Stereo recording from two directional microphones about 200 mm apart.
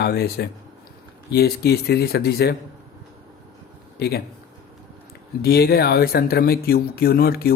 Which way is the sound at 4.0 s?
50° left (ahead or behind).